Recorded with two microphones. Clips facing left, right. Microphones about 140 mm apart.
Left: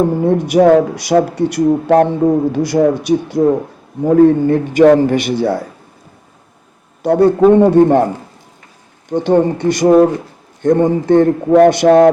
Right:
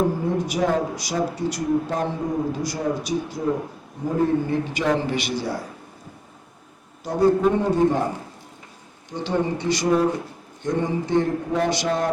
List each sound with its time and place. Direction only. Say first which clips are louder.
0.3 s a man's voice: left 13 dB; 65° left (ahead or behind)
7.0 s speech: left 9 dB; 70° left (ahead or behind)
9.0 s a man's voice: left 11 dB; 55° left (ahead or behind)